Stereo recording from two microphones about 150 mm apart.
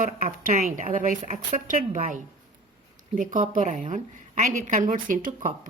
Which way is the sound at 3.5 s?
55° right (ahead or behind).